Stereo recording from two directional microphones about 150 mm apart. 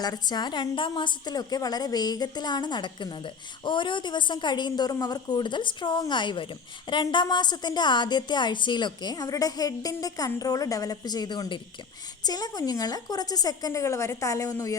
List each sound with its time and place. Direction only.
0.0 s a woman's voice: 25° left (ahead or behind)